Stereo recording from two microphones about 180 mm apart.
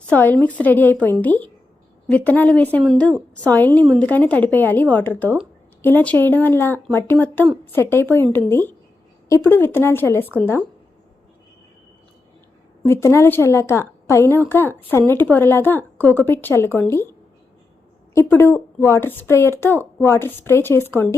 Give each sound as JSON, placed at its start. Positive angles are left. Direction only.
{"t": 0.1, "sound": "a woman's voice", "side_deg": 10}
{"t": 12.9, "sound": "a woman's voice", "side_deg": 15}